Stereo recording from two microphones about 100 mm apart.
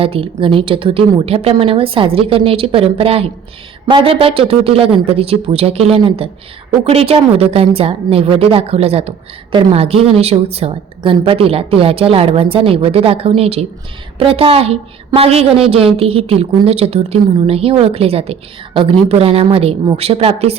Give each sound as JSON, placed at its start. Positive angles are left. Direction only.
{"t": 0.0, "sound": "speech", "side_deg": -70}
{"t": 3.8, "sound": "speech", "side_deg": -55}
{"t": 9.7, "sound": "speech", "side_deg": -75}
{"t": 14.2, "sound": "a woman's voice", "side_deg": -65}